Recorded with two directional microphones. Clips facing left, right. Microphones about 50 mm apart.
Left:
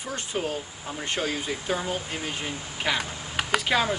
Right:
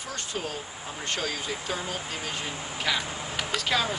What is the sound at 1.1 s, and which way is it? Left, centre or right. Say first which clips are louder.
Speech: left 3 dB; centre.